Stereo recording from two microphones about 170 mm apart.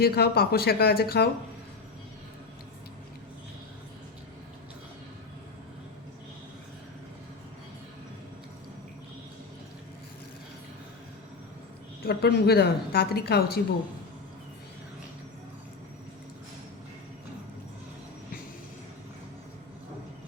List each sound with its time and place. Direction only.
0.0 s speech: 65° left (ahead or behind)
12.0 s a woman's voice: 70° left (ahead or behind)